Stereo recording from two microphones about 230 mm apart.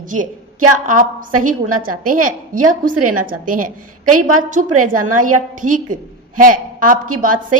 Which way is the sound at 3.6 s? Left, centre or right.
Right.